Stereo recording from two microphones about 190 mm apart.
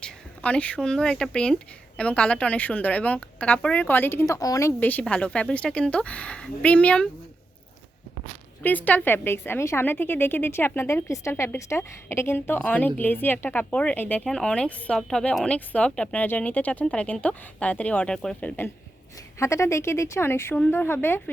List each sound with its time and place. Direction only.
0.0 s speech: 5° left (ahead or behind)
8.6 s speech: 10° left (ahead or behind)